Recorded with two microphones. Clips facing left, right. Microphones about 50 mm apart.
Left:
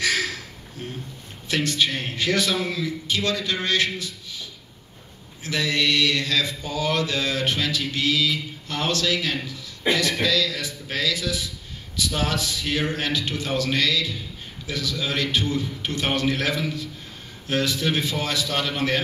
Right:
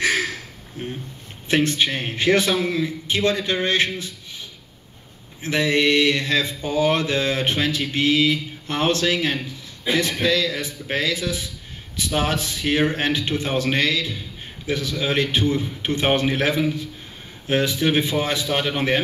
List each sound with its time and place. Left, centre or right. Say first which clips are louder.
0.0 s a sound: right 3 dB; right
1.5 s mantra: right 4 dB; right
12.0 s a man's voice: right 2 dB; right
14.7 s mantra: right 4 dB; right